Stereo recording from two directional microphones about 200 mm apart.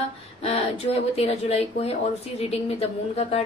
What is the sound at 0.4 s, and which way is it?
Speech, 30° left (ahead or behind).